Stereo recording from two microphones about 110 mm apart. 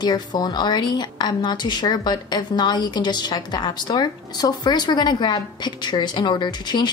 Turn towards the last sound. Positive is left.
turn(degrees=40)  # may be behind; listen again after turning